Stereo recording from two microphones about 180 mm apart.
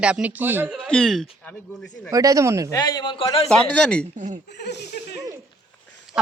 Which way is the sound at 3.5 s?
5° left (ahead or behind).